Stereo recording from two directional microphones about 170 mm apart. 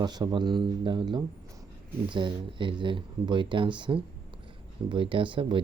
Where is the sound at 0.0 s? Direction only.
25° right (ahead or behind).